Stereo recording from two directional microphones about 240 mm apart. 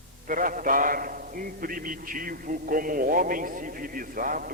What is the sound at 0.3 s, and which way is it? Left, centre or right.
A man's voice, right.